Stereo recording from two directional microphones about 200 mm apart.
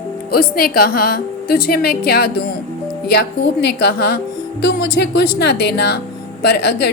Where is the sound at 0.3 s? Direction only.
50° left (ahead or behind).